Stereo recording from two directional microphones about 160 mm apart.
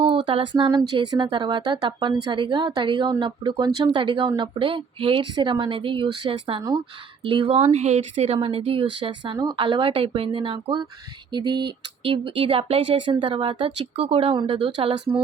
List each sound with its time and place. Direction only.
0.3 s speech: 30° right (ahead or behind)